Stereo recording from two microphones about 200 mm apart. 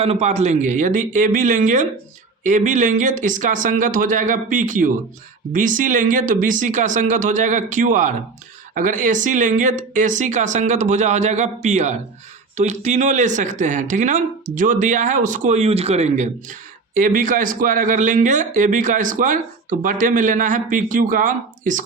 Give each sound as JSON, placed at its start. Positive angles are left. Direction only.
{"t": 0.0, "sound": "speech", "side_deg": -30}